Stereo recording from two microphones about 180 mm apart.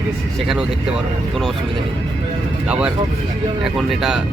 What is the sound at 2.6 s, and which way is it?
Speech, 5° right (ahead or behind).